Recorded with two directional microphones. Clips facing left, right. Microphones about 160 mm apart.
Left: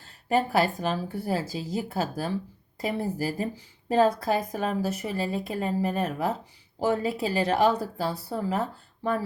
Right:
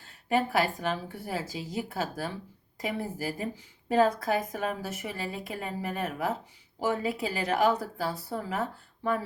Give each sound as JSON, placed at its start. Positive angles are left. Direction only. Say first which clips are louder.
{"t": 0.3, "sound": "a woman's voice", "louder": "left 3 dB", "side_deg": 40}